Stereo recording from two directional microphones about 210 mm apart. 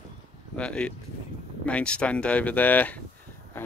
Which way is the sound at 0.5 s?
5° left (ahead or behind).